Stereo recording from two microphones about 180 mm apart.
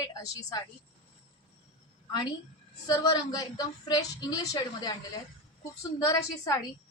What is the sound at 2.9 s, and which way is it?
A woman's voice, 20° left (ahead or behind).